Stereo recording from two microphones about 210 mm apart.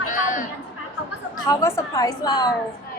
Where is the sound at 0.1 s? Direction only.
40° left (ahead or behind).